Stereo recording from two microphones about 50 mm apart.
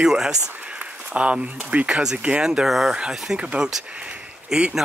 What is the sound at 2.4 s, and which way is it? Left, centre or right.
Speech, centre.